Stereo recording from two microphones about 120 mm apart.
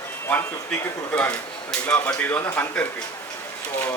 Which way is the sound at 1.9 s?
10° left (ahead or behind).